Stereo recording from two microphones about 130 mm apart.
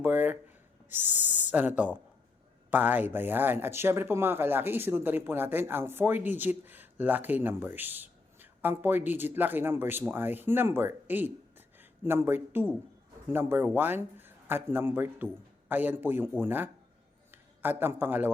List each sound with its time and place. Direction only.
0.0 s speech: 15° right (ahead or behind)
1.0 s speech: 65° left (ahead or behind)
1.5 s a man's voice: 10° right (ahead or behind)